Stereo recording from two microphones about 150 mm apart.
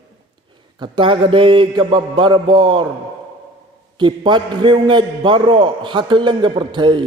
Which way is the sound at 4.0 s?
30° right (ahead or behind).